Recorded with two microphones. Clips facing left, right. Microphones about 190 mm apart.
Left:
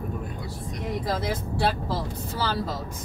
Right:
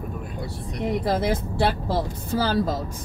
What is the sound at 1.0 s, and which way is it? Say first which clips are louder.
Speech: right 5 dB; 60° right (ahead or behind).